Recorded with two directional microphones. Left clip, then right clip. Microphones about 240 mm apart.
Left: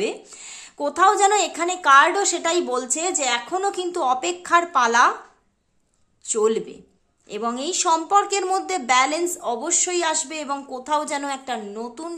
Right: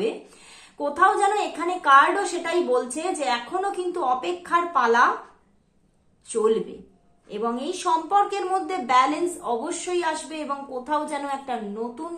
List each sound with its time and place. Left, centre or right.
0.7 s a woman's voice: left
6.2 s a woman's voice: left